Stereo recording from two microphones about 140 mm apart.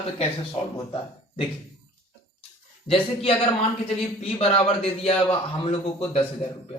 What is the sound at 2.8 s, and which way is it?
A man's voice, 40° left (ahead or behind).